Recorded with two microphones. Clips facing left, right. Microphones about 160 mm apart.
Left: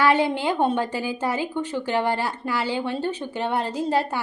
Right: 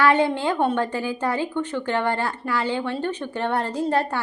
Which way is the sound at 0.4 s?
15° left (ahead or behind).